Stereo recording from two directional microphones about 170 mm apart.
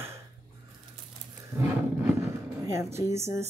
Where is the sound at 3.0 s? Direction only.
15° right (ahead or behind).